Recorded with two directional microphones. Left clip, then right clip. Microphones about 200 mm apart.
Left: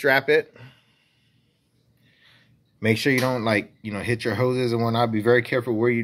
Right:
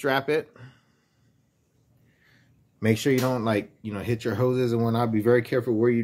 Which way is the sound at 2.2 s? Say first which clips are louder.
Left 5 dB; 15° right (ahead or behind).